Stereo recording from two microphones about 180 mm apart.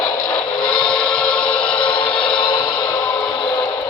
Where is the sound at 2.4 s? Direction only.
25° left (ahead or behind).